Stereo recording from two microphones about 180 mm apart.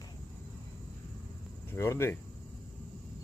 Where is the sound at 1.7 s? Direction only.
15° left (ahead or behind).